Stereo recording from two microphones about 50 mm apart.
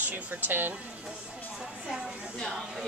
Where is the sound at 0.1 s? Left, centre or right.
Right.